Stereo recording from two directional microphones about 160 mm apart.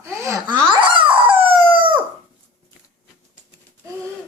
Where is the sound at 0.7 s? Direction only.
30° right (ahead or behind).